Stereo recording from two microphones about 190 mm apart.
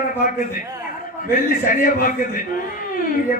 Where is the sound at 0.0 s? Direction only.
45° left (ahead or behind).